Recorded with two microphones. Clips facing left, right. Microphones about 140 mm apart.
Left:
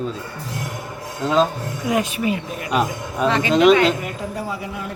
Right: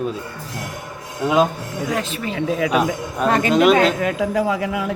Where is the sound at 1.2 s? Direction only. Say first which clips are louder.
Right 1 dB; 10° right (ahead or behind).